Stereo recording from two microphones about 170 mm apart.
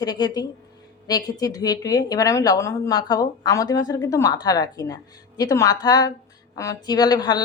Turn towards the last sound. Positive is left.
turn(degrees=25)  # may be behind; listen again after turning